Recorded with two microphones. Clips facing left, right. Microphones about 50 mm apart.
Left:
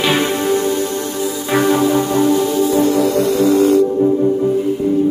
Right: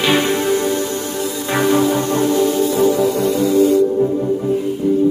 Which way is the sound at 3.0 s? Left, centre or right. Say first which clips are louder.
Left 2 dB; left.